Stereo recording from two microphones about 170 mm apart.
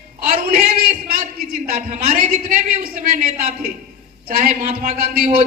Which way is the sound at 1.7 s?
40° right (ahead or behind).